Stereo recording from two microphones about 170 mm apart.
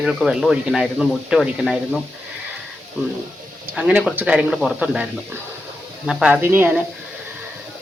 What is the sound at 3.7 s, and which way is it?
Speech, 5° right (ahead or behind).